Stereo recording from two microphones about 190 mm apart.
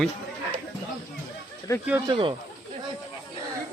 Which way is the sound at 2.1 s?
25° right (ahead or behind).